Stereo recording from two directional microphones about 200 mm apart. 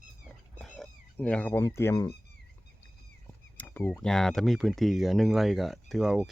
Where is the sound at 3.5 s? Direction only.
10° left (ahead or behind).